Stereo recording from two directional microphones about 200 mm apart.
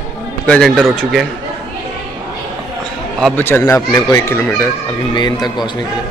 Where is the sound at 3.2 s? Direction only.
5° left (ahead or behind); by 5.7 s 20° left (ahead or behind).